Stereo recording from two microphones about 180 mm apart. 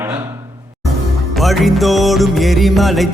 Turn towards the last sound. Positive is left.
turn(degrees=0)  # may be behind; listen again after turning